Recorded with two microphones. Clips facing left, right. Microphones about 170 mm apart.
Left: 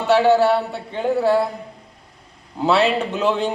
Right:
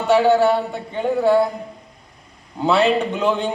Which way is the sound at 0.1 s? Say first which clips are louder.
Even; centre (ahead or behind).